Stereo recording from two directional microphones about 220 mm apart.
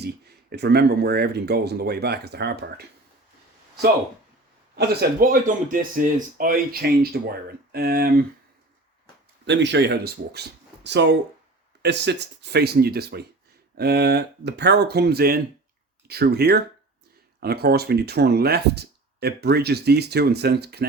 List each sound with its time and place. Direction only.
0.5 s speech: 45° right (ahead or behind)
4.8 s speech: 45° right (ahead or behind)
9.5 s speech: 50° right (ahead or behind)